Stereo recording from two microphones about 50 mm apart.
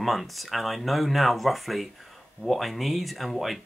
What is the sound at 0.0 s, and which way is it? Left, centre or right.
Speech, centre.